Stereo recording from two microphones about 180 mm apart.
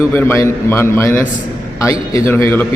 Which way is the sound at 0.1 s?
10° left (ahead or behind).